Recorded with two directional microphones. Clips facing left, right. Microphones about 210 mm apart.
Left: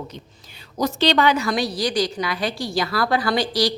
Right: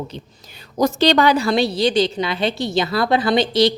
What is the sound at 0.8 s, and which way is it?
A woman's voice, 45° right (ahead or behind).